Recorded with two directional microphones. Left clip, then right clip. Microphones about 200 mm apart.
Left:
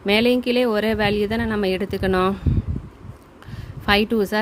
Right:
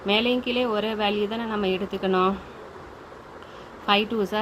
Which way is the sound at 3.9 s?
50° left (ahead or behind).